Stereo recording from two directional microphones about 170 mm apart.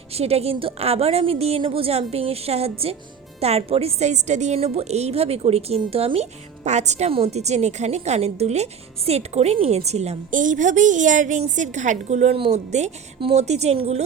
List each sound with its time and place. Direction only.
0.1 s a woman's voice: 35° right (ahead or behind)